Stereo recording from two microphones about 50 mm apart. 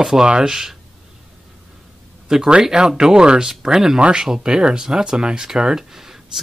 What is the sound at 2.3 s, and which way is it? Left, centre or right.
Speech, centre.